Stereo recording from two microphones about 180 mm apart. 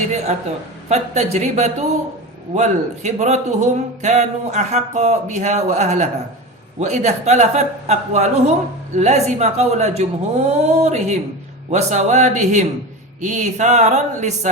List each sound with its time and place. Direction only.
0.9 s a man's voice: 40° right (ahead or behind)